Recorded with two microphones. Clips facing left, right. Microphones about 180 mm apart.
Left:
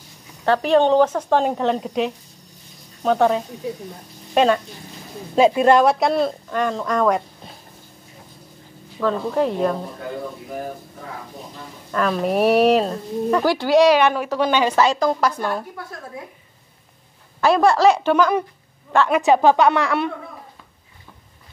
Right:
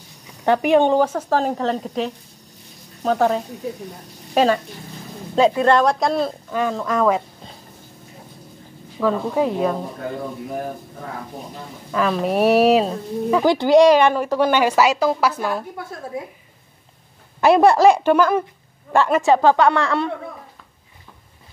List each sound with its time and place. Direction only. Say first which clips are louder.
0.5 s speech: even; 15° right (ahead or behind)
5.3 s speech: left 1 dB; 10° left (ahead or behind)
9.0 s speech: right 1 dB; 5° right (ahead or behind)
11.9 s speech: even; centre (ahead or behind)
13.5 s speech: right 3 dB; 20° right (ahead or behind)
13.8 s a woman's voice: right 2 dB; 10° left (ahead or behind)
14.3 s a woman's voice: right 2 dB; 10° right (ahead or behind)
17.4 s a woman's voice: right 3 dB; 20° right (ahead or behind)
19.2 s a woman's voice: left 1 dB; 15° left (ahead or behind)